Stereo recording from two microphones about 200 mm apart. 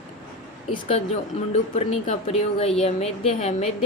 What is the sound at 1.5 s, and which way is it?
Speech, 35° left (ahead or behind).